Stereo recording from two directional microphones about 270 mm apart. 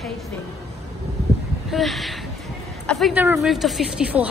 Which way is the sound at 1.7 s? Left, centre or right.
Centre.